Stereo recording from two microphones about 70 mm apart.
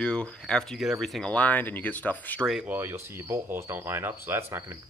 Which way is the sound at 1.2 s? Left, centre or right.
Left.